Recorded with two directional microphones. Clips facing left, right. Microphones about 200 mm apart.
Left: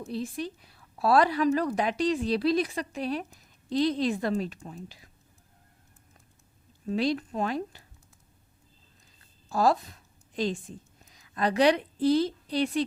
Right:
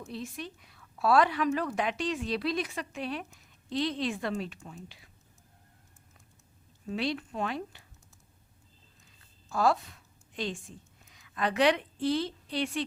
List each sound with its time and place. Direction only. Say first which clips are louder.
0.0 s a woman's voice: left 6 dB; 35° left (ahead or behind)
6.8 s a woman's voice: left 5 dB; 40° left (ahead or behind)
9.5 s a woman's voice: left 3 dB; 35° left (ahead or behind)